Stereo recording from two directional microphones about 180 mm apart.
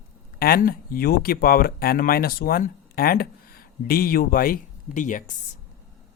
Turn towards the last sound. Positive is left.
turn(degrees=45)  # may be behind; listen again after turning